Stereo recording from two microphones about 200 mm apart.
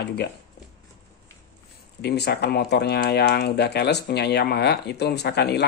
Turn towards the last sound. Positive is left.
turn(degrees=55)  # may be behind; listen again after turning